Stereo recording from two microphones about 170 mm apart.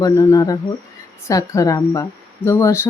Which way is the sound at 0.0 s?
20° left (ahead or behind).